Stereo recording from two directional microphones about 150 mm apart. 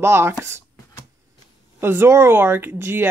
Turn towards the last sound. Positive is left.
turn(degrees=-15)  # may be behind; listen again after turning